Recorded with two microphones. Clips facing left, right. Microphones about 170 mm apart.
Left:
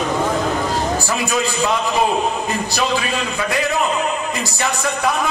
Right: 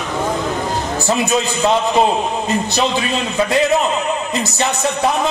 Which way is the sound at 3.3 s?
25° right (ahead or behind).